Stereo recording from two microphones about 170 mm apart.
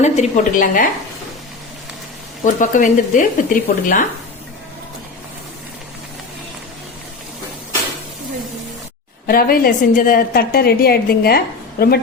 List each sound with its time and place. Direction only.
0.0 s speech: 50° left (ahead or behind)
2.4 s speech: 50° left (ahead or behind)
9.2 s a woman's voice: 60° left (ahead or behind)